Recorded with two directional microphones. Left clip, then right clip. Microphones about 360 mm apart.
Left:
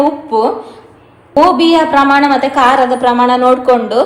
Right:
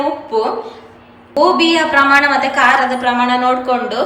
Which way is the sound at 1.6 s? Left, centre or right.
Centre.